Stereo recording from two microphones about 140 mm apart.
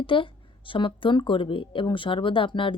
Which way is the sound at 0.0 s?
40° left (ahead or behind).